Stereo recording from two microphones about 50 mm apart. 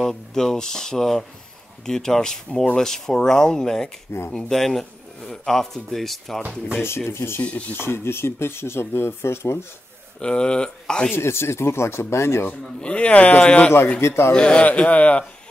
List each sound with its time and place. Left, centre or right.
0.0 s speech: centre
7.1 s speech: left
7.4 s a man's voice: left
7.8 s speech: left
10.2 s speech: centre
11.1 s speech: left
12.4 s a man's voice: left
14.0 s speech: left
14.3 s a man's voice: centre